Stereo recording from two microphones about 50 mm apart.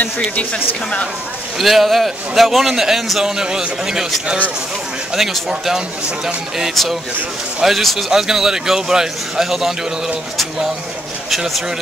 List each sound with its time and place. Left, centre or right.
0.4 s a woman's voice: left
1.6 s a man's voice: centre
6.7 s a man's voice: centre